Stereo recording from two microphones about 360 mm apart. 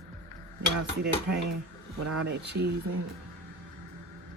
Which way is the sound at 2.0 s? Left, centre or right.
Right.